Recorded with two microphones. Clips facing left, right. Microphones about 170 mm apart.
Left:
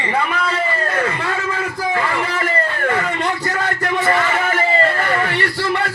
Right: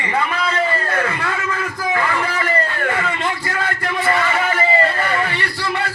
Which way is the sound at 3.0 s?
40° left (ahead or behind).